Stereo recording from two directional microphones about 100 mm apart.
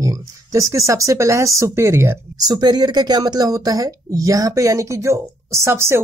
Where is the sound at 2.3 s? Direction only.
40° right (ahead or behind).